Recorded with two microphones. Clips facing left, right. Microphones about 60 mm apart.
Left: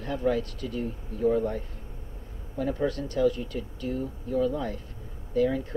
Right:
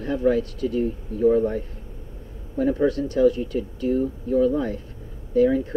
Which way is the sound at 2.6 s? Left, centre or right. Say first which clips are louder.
Right 7 dB; right.